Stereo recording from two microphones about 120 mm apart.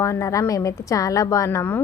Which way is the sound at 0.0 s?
25° left (ahead or behind).